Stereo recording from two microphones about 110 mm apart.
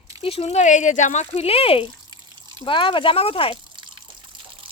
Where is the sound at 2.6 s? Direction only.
50° left (ahead or behind).